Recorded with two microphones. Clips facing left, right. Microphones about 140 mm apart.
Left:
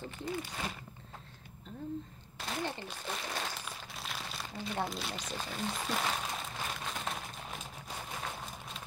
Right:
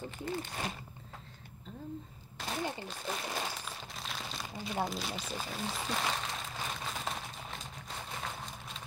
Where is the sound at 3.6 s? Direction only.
Centre (ahead or behind).